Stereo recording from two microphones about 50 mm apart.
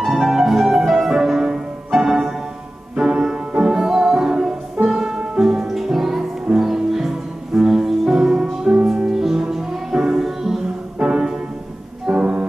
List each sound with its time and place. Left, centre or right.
0.0 s music: centre